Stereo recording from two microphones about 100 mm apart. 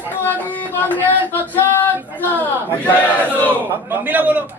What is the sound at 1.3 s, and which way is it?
Male singing, 20° left (ahead or behind).